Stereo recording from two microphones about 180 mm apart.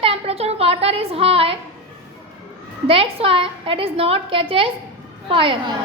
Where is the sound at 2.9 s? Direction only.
30° right (ahead or behind).